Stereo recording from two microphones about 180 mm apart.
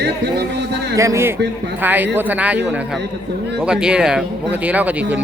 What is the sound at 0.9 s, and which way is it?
Speech, 15° right (ahead or behind).